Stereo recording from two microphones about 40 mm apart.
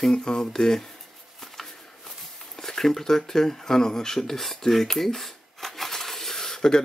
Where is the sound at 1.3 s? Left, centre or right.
Centre.